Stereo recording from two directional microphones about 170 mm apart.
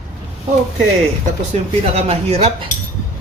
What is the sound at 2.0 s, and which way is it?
Speech, 35° right (ahead or behind).